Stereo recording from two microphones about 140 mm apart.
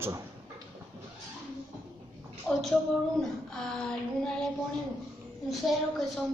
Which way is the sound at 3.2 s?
5° left (ahead or behind).